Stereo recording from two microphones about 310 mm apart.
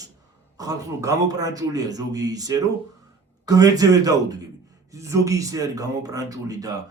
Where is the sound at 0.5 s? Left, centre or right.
Centre.